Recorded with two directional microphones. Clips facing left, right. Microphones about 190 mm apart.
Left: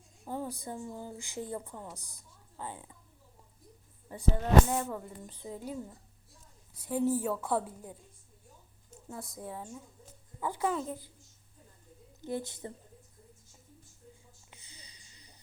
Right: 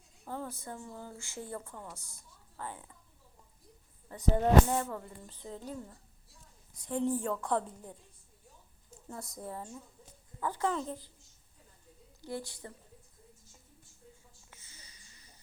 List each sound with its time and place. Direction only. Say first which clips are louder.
0.3 s speech: left 3 dB; 15° left (ahead or behind)
2.1 s a sound: left 1 dB; 15° left (ahead or behind)
4.1 s speech: right 1 dB; 15° left (ahead or behind)
9.0 s a woman's voice: left 1 dB; centre (ahead or behind)
12.2 s a woman's voice: left 4 dB; 20° left (ahead or behind)
14.5 s a sound: left 2 dB; 15° left (ahead or behind)